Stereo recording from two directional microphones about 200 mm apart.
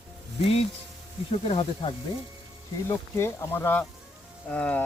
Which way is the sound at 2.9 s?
15° left (ahead or behind).